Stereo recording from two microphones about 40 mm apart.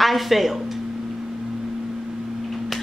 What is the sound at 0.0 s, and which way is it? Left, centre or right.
Speech, centre.